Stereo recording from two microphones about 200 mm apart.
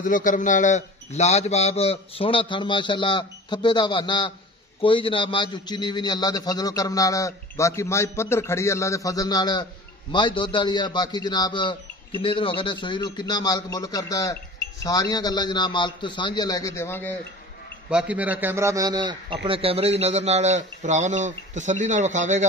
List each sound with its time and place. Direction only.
0.0 s a man's voice: 40° left (ahead or behind); by 17.1 s 10° left (ahead or behind)
17.8 s a man's voice: 5° right (ahead or behind); by 22.5 s 35° right (ahead or behind)